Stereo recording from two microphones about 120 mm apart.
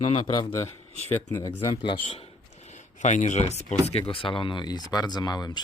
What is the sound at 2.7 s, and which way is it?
Speech, 85° left.